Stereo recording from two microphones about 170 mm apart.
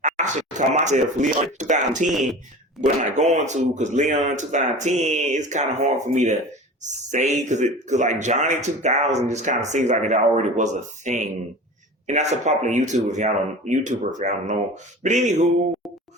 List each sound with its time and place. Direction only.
0.0 s speech: 45° right (ahead or behind)
2.1 s speech: centre (ahead or behind)
2.8 s speech: 45° right (ahead or behind)